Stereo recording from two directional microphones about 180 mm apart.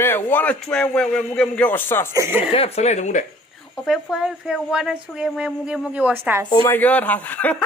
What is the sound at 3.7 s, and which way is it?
Speech, centre (ahead or behind).